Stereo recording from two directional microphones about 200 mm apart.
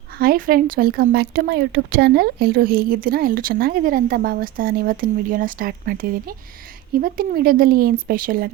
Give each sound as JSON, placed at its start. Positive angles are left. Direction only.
{"t": 0.2, "sound": "speech", "side_deg": -45}